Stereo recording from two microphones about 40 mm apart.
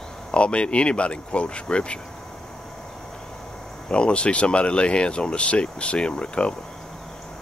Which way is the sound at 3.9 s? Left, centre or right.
Left.